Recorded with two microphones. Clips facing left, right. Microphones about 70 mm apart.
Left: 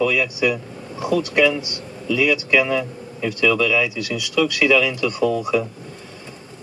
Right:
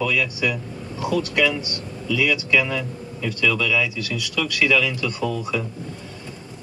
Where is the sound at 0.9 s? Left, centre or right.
Left.